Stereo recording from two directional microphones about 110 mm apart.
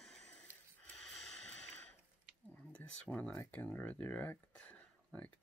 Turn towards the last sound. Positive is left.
turn(degrees=10)  # may be behind; listen again after turning